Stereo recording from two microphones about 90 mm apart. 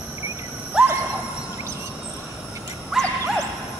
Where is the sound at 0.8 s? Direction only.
10° right (ahead or behind).